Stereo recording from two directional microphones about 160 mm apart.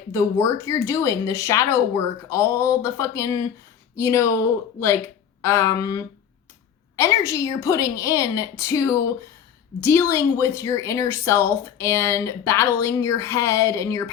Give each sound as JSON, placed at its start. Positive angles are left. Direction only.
{"t": 0.1, "sound": "speech", "side_deg": 20}